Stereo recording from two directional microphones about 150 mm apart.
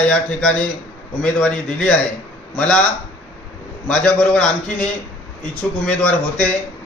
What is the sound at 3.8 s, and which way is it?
A man's voice, 5° left (ahead or behind).